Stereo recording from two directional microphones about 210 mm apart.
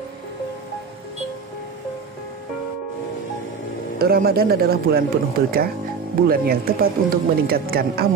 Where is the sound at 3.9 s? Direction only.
45° right (ahead or behind).